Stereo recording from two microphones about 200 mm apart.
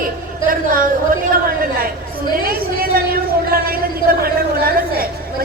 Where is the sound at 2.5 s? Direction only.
50° right (ahead or behind).